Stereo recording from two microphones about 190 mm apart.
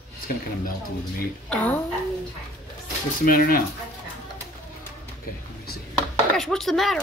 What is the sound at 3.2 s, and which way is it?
Speech, 50° left (ahead or behind).